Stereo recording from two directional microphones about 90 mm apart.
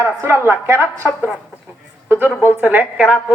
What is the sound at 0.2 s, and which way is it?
A man's voice, 25° right (ahead or behind).